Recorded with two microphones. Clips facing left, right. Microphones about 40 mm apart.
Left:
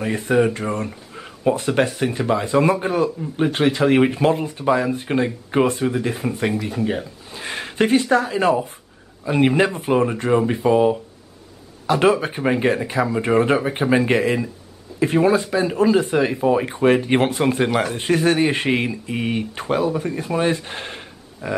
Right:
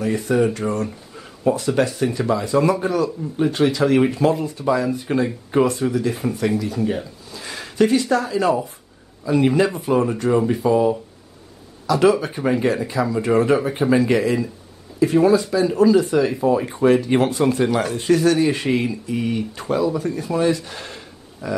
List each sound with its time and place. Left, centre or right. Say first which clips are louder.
0.0 s a man's voice: even; left